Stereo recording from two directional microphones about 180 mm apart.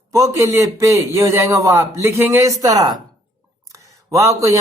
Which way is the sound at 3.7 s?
15° right (ahead or behind).